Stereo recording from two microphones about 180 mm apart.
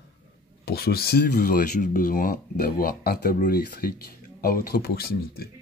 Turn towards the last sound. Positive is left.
turn(degrees=60)  # may be behind; listen again after turning